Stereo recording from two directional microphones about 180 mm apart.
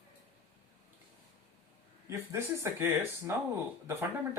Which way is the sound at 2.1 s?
15° right (ahead or behind).